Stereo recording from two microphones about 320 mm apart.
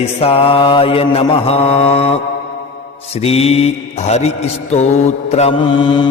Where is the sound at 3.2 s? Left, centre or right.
Centre.